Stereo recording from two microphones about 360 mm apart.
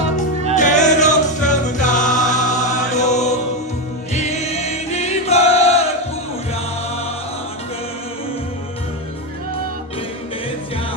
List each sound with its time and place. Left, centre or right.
0.5 s music: centre
4.1 s choir: centre